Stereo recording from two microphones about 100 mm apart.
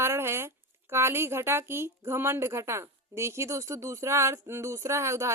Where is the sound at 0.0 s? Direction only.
25° right (ahead or behind).